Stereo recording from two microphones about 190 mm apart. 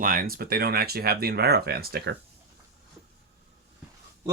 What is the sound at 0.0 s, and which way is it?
Speech, 50° right (ahead or behind).